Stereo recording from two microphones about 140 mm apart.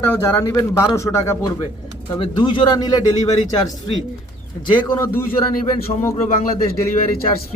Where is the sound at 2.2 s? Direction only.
35° left (ahead or behind).